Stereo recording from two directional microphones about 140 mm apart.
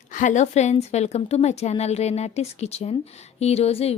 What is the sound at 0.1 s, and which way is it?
A woman's voice, 65° left (ahead or behind).